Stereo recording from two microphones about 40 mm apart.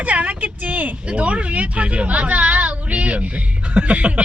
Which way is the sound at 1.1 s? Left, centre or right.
Right.